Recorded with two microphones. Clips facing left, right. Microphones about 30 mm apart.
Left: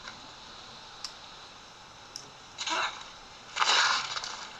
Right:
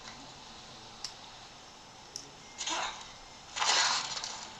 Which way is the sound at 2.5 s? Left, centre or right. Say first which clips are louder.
Left 4 dB; left.